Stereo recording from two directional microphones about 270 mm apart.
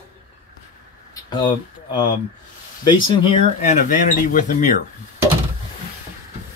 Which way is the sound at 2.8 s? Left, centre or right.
Centre.